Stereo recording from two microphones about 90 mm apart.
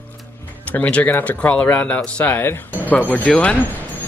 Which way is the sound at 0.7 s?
15° left (ahead or behind).